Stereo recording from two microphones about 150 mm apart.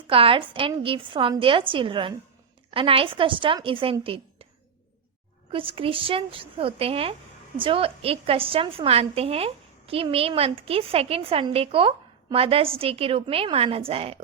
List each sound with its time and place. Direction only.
0.1 s a woman's voice: 35° right (ahead or behind)
5.5 s a woman's voice: 35° right (ahead or behind)